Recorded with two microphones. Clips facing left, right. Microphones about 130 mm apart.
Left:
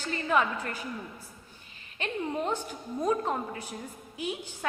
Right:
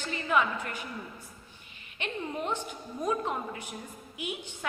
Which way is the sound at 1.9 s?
35° left (ahead or behind).